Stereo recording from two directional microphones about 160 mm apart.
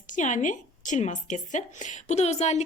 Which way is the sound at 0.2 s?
50° left (ahead or behind).